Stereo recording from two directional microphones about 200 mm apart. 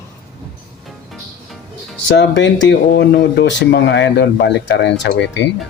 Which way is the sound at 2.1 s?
60° left (ahead or behind).